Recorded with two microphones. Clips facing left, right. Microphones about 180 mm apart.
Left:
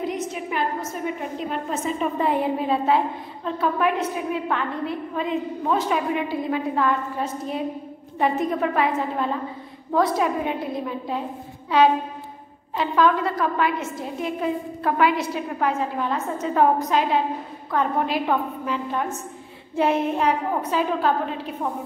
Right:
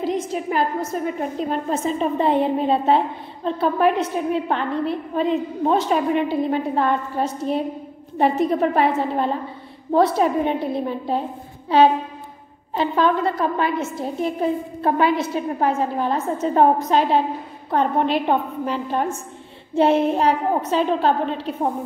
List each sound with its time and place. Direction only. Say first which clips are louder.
0.0 s a sound: right 4 dB; 30° right (ahead or behind)
1.5 s a woman's voice: right 3 dB; 30° right (ahead or behind)
12.7 s a woman's voice: right 1 dB; 30° right (ahead or behind)